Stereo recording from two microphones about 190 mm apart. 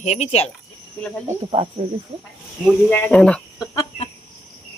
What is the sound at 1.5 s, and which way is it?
Speech, 25° right (ahead or behind).